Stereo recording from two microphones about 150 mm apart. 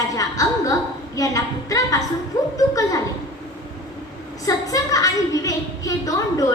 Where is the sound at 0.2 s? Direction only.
20° left (ahead or behind).